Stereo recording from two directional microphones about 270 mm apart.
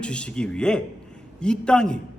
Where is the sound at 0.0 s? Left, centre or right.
Centre.